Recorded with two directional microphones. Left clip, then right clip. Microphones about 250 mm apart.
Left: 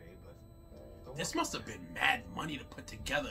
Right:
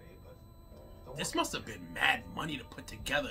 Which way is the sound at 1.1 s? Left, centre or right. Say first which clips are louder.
Right 2 dB; centre.